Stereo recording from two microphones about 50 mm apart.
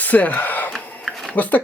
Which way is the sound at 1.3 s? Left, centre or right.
Left.